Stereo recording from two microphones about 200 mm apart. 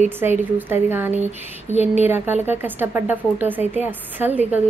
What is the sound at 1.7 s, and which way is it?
Speech, 30° left (ahead or behind).